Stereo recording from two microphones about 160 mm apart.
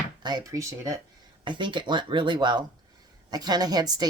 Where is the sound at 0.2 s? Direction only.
25° right (ahead or behind).